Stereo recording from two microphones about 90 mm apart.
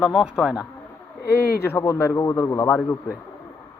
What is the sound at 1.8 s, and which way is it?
Speech, 35° left (ahead or behind).